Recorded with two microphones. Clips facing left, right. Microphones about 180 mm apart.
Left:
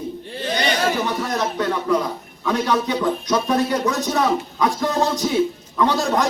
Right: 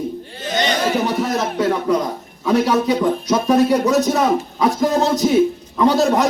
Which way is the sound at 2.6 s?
5° right (ahead or behind).